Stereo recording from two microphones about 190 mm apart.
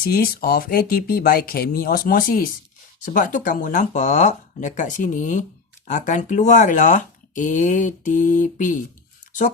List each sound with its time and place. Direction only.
0.0 s speech: 50° left (ahead or behind)